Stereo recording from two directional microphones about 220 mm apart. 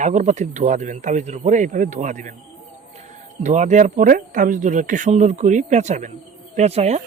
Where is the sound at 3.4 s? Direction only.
35° right (ahead or behind).